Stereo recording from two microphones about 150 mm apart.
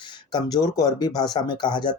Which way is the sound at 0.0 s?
30° left (ahead or behind).